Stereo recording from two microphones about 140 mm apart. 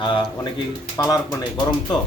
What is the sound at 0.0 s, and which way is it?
Speech, 35° left (ahead or behind).